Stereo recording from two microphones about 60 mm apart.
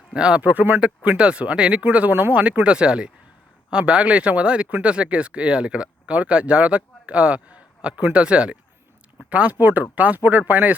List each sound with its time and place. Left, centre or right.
0.1 s speech: centre